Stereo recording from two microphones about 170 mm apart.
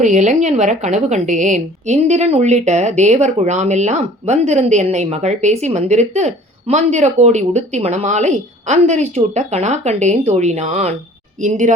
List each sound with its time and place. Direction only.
0.0 s a woman's voice: 45° right (ahead or behind)